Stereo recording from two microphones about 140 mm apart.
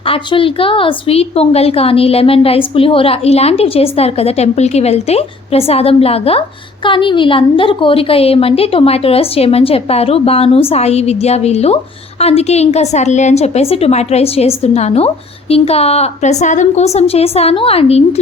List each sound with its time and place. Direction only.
0.1 s a woman's voice: 40° left (ahead or behind)